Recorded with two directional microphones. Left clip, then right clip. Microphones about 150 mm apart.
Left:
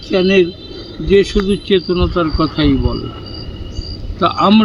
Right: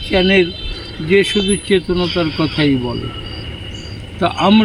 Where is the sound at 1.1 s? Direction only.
5° left (ahead or behind).